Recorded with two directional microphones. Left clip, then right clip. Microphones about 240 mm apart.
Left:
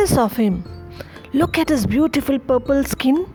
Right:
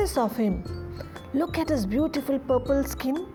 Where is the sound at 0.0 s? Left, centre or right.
Left.